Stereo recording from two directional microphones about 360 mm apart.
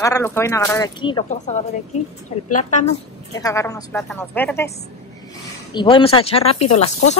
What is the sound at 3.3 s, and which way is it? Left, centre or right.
A woman's voice, centre.